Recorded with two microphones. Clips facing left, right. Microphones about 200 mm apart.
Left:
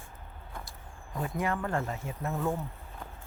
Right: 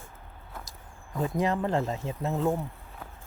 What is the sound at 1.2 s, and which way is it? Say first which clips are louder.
Speech: right 5 dB; 20° right (ahead or behind).